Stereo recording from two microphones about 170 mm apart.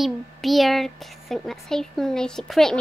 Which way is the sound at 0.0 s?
Centre (ahead or behind).